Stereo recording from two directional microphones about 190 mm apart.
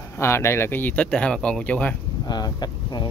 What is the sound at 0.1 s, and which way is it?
Speech, 15° left (ahead or behind).